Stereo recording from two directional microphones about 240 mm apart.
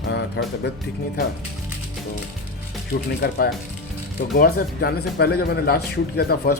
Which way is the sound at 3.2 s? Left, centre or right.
Left.